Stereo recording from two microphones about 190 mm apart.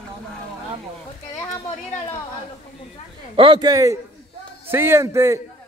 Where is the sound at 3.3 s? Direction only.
25° right (ahead or behind).